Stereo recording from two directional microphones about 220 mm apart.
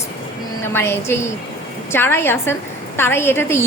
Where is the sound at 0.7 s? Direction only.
10° left (ahead or behind).